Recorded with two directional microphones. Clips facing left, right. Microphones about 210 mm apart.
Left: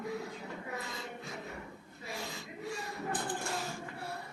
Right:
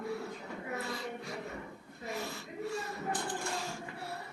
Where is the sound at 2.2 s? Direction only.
15° left (ahead or behind).